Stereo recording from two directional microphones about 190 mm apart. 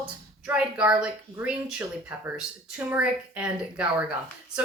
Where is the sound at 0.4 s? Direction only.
5° right (ahead or behind).